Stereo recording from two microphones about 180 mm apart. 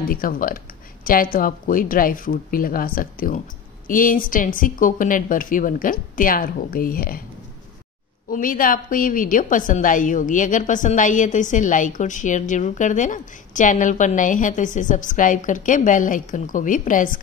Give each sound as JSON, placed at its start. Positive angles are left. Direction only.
{"t": 0.1, "sound": "a woman's voice", "side_deg": 50}
{"t": 8.3, "sound": "a woman's voice", "side_deg": 50}